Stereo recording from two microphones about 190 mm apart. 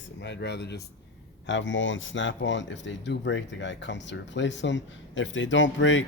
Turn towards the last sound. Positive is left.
turn(degrees=80)